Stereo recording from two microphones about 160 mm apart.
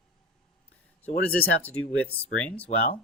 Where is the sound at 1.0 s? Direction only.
10° left (ahead or behind).